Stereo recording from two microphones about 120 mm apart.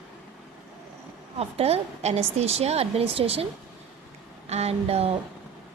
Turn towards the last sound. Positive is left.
turn(degrees=-60)  # may be behind; listen again after turning